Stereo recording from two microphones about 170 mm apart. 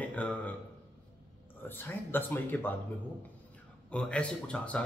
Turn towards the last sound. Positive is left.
turn(degrees=5)  # may be behind; listen again after turning